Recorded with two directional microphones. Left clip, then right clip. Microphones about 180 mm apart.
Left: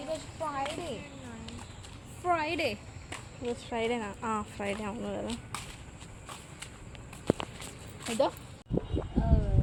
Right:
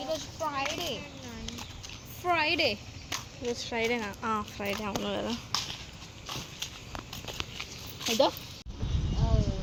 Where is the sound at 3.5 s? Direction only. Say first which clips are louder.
Right 2 dB; 10° left (ahead or behind).